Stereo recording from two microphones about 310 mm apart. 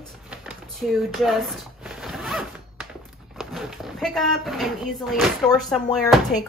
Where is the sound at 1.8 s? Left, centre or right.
Centre.